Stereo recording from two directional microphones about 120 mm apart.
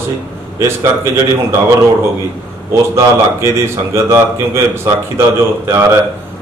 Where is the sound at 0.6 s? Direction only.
25° right (ahead or behind).